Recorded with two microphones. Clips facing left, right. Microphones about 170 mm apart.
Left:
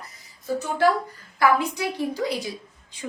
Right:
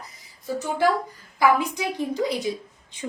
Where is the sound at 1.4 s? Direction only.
15° right (ahead or behind).